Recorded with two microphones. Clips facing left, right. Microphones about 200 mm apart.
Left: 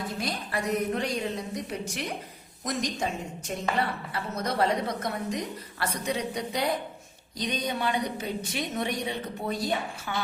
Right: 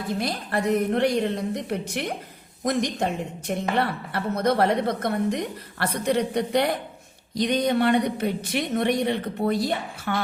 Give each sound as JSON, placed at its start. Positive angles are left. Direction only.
{"t": 0.5, "sound": "a woman's voice", "side_deg": -60}